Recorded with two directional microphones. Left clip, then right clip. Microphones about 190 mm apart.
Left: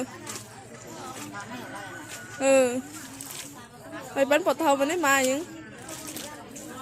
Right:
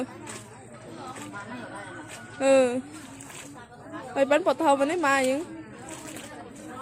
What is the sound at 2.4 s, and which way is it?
Speech, 5° right (ahead or behind).